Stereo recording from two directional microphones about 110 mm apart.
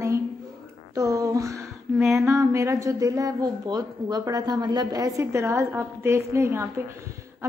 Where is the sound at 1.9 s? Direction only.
Centre (ahead or behind).